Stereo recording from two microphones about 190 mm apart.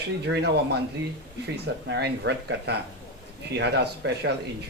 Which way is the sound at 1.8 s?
65° right (ahead or behind).